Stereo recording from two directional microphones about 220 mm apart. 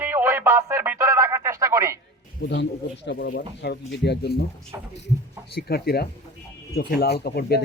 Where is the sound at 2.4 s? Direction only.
50° left (ahead or behind).